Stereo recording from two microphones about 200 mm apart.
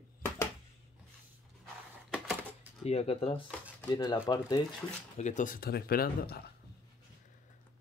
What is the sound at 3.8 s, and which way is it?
Speech, 15° left (ahead or behind).